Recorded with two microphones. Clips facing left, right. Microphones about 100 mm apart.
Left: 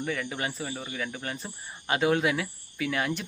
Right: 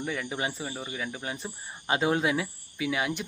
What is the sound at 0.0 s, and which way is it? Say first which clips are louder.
Speech: even; 15° right (ahead or behind).